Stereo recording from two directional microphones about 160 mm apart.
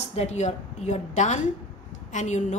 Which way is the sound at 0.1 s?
45° left (ahead or behind).